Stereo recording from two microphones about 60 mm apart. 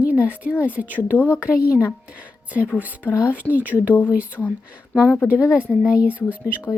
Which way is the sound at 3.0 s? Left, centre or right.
Left.